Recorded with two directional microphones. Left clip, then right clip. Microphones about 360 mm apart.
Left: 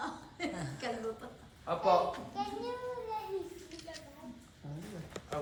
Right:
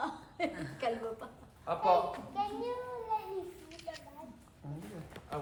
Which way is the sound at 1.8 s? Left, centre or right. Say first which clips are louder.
Even; centre.